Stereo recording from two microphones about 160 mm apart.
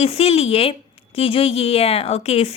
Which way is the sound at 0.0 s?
40° left (ahead or behind).